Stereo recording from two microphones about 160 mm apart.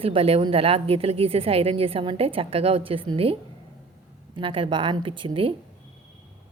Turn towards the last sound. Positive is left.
turn(degrees=-30)  # may be behind; listen again after turning